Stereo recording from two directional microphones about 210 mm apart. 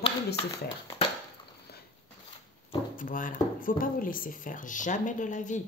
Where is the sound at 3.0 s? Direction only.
40° left (ahead or behind).